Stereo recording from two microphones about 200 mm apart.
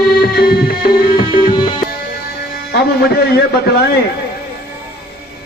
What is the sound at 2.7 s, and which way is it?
A man's voice, 50° left (ahead or behind).